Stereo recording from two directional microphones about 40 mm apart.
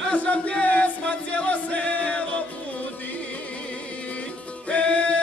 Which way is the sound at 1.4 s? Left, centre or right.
Left.